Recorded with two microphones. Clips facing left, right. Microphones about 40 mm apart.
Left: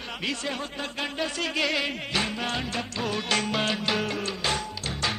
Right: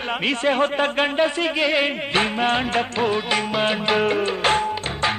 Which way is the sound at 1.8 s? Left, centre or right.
Right.